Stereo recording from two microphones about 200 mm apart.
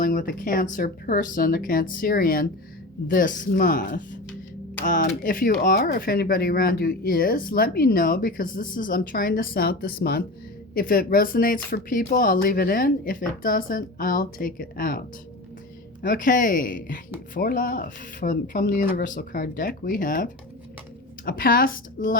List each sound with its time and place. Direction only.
0.0 s speech: 45° left (ahead or behind)